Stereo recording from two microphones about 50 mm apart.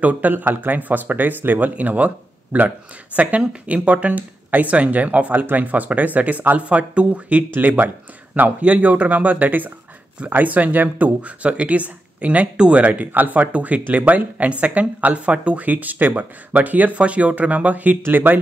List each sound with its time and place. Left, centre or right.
0.0 s speech: right
7.5 s speech: right